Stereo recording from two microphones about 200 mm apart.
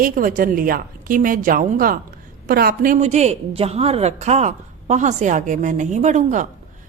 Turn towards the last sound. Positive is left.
turn(degrees=-35)  # may be behind; listen again after turning